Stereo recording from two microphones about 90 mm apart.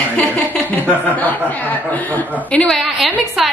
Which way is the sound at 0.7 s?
20° left (ahead or behind).